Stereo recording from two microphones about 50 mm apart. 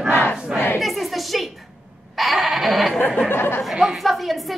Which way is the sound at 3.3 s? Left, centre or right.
Left.